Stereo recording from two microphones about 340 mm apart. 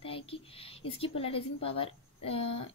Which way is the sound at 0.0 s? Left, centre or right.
Centre.